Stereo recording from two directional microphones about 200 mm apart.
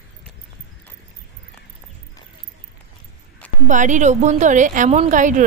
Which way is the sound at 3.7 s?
40° right (ahead or behind).